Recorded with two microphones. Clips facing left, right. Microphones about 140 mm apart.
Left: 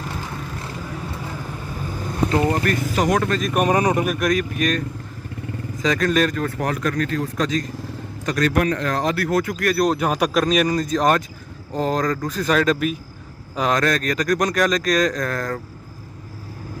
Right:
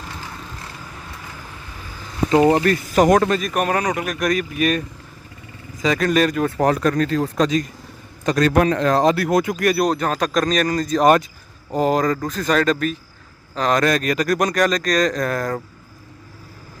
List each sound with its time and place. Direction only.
2.2 s speech: 20° right (ahead or behind)
3.0 s speech: 45° right (ahead or behind)
3.3 s speech: centre (ahead or behind)
3.6 s speech: 20° left (ahead or behind)
4.0 s speech: 5° left (ahead or behind)
6.6 s speech: 35° right (ahead or behind)
9.8 s speech: 5° left (ahead or behind)
11.7 s speech: 10° right (ahead or behind)
13.7 s speech: 10° right (ahead or behind)
15.2 s speech: 10° right (ahead or behind)